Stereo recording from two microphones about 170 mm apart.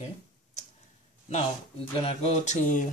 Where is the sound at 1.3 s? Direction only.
40° left (ahead or behind).